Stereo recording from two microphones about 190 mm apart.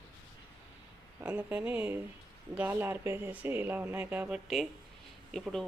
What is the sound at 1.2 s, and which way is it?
Speech, 10° right (ahead or behind).